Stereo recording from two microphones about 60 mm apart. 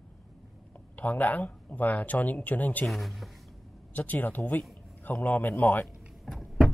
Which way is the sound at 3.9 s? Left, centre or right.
Left.